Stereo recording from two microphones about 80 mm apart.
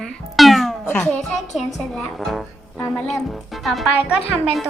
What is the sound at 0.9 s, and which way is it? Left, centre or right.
Speech, left.